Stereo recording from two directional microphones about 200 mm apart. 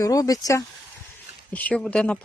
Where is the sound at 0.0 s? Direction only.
15° left (ahead or behind).